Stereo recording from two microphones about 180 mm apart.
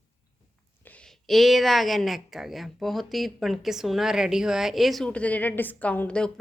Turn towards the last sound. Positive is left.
turn(degrees=5)  # may be behind; listen again after turning